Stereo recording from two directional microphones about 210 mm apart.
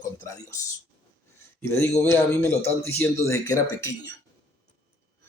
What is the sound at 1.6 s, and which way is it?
A man's voice, 10° left (ahead or behind).